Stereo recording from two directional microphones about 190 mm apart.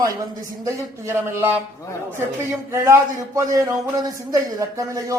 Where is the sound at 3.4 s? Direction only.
15° right (ahead or behind).